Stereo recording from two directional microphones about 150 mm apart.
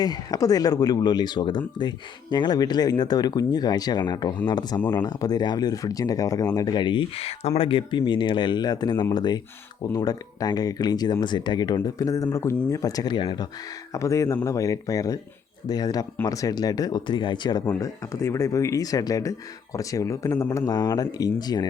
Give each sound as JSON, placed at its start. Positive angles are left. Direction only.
{"t": 0.0, "sound": "speech", "side_deg": 25}
{"t": 13.9, "sound": "speech", "side_deg": 20}